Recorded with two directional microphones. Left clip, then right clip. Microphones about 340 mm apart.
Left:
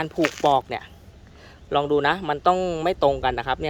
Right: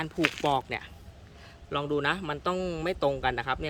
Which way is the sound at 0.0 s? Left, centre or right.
Centre.